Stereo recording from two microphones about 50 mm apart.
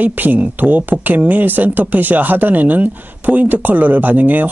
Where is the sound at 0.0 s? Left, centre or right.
Right.